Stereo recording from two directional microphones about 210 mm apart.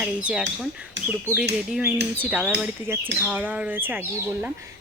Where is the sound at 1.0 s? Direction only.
60° right (ahead or behind).